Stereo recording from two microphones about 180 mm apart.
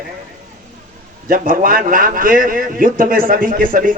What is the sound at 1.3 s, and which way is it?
Speech, 50° right (ahead or behind).